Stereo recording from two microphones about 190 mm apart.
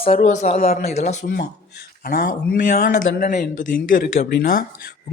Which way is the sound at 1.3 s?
55° left (ahead or behind).